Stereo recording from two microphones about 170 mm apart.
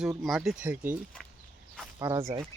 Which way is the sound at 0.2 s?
Centre (ahead or behind).